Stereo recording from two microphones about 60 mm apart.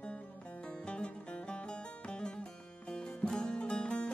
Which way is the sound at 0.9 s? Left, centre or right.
Centre.